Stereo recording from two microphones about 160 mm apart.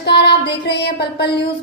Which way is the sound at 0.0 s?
90° left.